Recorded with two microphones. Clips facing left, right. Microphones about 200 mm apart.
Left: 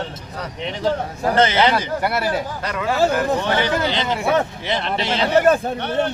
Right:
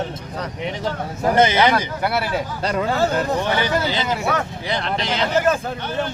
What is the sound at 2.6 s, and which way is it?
Speech, 30° right (ahead or behind).